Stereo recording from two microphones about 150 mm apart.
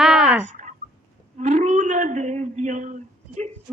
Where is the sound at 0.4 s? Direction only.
55° right (ahead or behind).